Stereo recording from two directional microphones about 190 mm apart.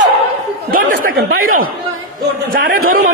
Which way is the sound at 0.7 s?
50° right (ahead or behind).